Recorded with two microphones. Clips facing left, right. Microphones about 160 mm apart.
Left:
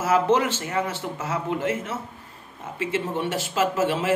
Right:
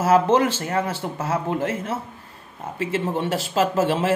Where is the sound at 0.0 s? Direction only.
35° right (ahead or behind).